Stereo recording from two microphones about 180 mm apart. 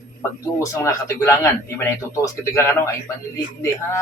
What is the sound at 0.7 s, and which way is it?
Speech, 15° left (ahead or behind).